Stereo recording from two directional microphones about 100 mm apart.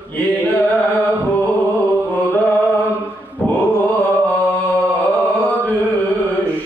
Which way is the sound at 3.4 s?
15° left (ahead or behind).